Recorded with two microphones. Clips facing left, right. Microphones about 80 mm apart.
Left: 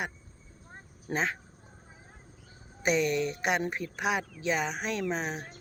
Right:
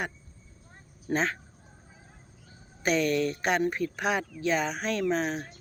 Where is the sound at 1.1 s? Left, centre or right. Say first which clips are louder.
Right 3 dB; centre.